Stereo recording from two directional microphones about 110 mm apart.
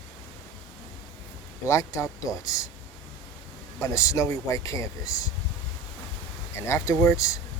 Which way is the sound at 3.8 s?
30° left (ahead or behind).